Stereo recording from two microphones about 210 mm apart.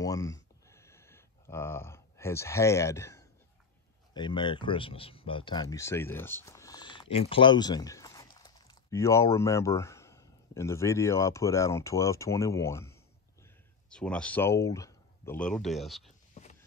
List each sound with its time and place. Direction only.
0.0 s a sound: 15° left (ahead or behind)
4.1 s speech: 20° left (ahead or behind); by 16.0 s centre (ahead or behind)
16.4 s clip-clop: 30° left (ahead or behind)